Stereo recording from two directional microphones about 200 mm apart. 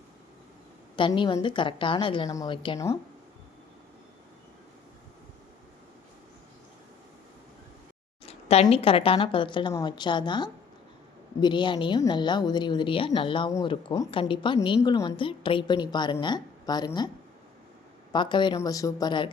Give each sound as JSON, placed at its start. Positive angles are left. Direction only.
{"t": 0.9, "sound": "a woman's voice", "side_deg": 25}
{"t": 8.2, "sound": "a sound", "side_deg": 30}
{"t": 8.6, "sound": "a woman's voice", "side_deg": 30}
{"t": 18.1, "sound": "a woman's voice", "side_deg": 25}